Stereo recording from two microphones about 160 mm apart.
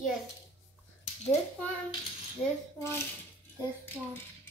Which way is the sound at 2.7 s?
15° left (ahead or behind).